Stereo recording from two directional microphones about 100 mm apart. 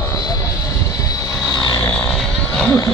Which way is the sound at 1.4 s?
40° left (ahead or behind).